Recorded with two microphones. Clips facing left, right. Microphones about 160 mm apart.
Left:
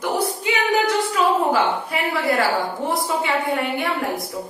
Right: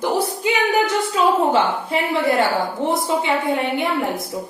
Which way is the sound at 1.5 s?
25° right (ahead or behind).